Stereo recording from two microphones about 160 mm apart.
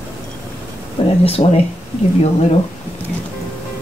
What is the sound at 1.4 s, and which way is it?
Speech, 45° left (ahead or behind).